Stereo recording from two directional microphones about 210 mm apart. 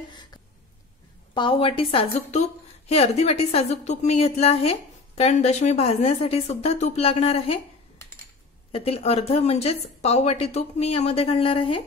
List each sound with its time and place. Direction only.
0.1 s a sound: 20° left (ahead or behind)
1.3 s a woman's voice: 25° left (ahead or behind)
8.7 s speech: 30° left (ahead or behind)